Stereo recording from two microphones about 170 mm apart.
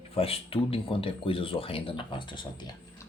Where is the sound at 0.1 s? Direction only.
35° left (ahead or behind).